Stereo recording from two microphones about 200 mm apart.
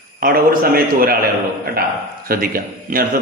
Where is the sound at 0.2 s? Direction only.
50° right (ahead or behind).